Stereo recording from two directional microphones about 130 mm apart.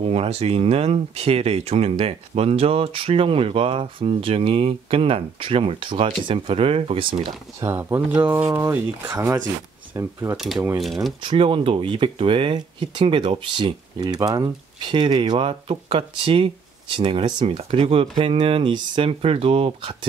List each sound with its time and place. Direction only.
0.0 s speech: 50° right (ahead or behind)
7.6 s speech: 20° right (ahead or behind)
10.3 s speech: centre (ahead or behind)
11.2 s speech: 45° right (ahead or behind)